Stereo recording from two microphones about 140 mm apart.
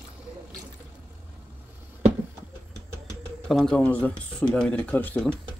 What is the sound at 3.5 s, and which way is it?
Speech, 5° left (ahead or behind).